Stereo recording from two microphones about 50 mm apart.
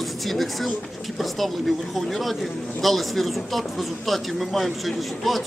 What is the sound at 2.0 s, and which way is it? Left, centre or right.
A man's voice, centre.